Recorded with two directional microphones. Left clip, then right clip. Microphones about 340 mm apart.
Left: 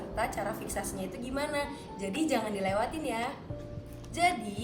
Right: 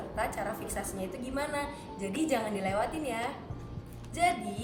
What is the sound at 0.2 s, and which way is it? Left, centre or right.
A woman's voice, centre.